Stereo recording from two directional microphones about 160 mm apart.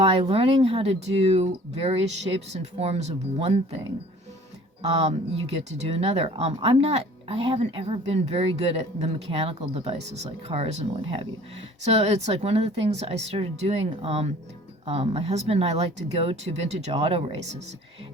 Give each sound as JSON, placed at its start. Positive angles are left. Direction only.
{"t": 0.0, "sound": "speech", "side_deg": -40}
{"t": 4.8, "sound": "speech", "side_deg": -40}